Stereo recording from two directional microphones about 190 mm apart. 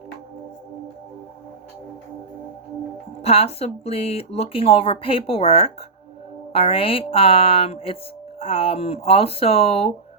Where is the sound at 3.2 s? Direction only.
30° left (ahead or behind).